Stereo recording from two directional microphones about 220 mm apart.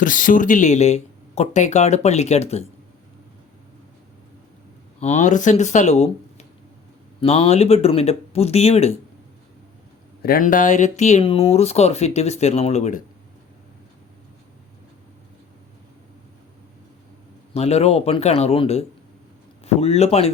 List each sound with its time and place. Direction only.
0.0 s speech: 35° left (ahead or behind)
4.9 s speech: 30° left (ahead or behind)
10.2 s speech: 40° left (ahead or behind)
17.5 s speech: 30° left (ahead or behind)